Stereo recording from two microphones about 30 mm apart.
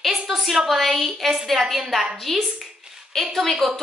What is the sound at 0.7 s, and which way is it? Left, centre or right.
A woman's voice, centre.